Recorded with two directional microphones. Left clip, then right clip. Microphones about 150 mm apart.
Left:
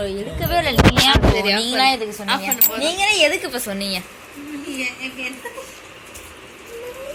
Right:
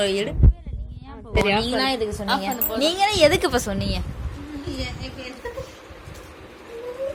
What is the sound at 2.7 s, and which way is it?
Speech, 50° right (ahead or behind).